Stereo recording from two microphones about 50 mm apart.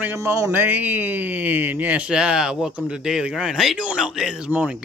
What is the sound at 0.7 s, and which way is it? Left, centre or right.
Speech, right.